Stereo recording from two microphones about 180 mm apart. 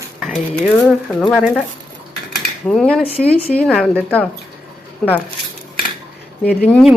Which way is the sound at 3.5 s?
5° left (ahead or behind).